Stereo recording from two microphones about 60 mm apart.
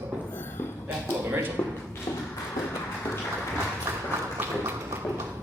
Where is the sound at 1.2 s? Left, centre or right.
Right.